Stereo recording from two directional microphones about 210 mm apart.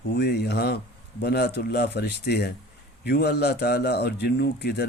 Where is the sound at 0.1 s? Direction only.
50° left (ahead or behind).